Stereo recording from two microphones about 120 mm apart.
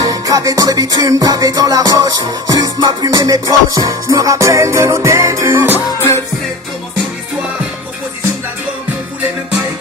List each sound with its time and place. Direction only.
0.0 s music: 30° right (ahead or behind)